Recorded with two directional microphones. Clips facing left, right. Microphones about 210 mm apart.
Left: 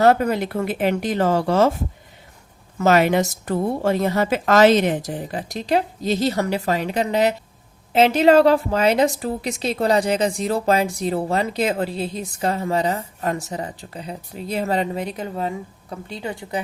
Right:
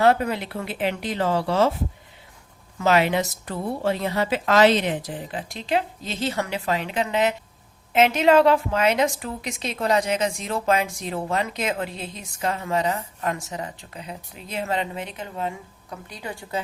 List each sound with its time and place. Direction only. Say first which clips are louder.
0.0 s speech: left 3 dB; 45° left (ahead or behind)
2.7 s a woman's voice: left 4 dB; 45° left (ahead or behind)
16.0 s speech: left 6 dB; 25° left (ahead or behind)